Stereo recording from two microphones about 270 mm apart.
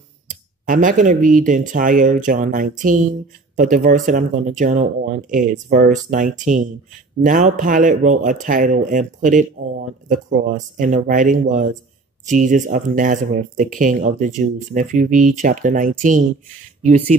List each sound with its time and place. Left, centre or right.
0.7 s speech: right